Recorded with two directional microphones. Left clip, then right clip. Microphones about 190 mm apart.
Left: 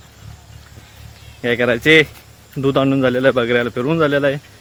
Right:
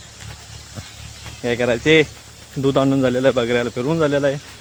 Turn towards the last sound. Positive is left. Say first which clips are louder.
# left 2 dB
turn(degrees=25)  # may be behind; listen again after turning